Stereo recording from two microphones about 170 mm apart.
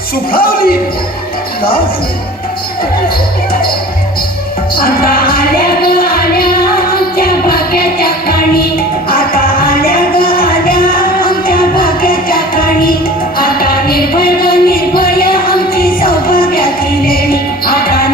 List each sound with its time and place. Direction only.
0.3 s speech: 60° left (ahead or behind)
4.8 s music: 60° left (ahead or behind)